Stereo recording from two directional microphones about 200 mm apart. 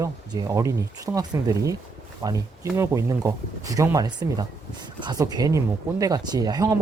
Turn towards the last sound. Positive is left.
turn(degrees=-20)  # may be behind; listen again after turning